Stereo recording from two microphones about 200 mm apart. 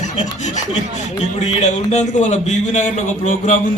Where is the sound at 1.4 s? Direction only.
35° left (ahead or behind).